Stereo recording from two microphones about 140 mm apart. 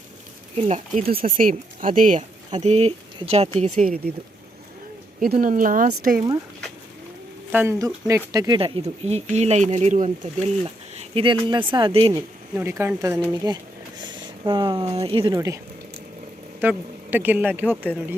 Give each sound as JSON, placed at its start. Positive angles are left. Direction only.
{"t": 0.5, "sound": "speech", "side_deg": -50}
{"t": 1.0, "sound": "speech", "side_deg": -90}
{"t": 2.6, "sound": "speech", "side_deg": -50}
{"t": 3.6, "sound": "speech", "side_deg": -65}
{"t": 5.4, "sound": "speech", "side_deg": -80}
{"t": 7.5, "sound": "speech", "side_deg": -15}
{"t": 10.6, "sound": "speech", "side_deg": -40}
{"t": 12.5, "sound": "speech", "side_deg": -20}
{"t": 13.4, "sound": "speech", "side_deg": -30}
{"t": 15.3, "sound": "speech", "side_deg": -25}
{"t": 16.6, "sound": "speech", "side_deg": -15}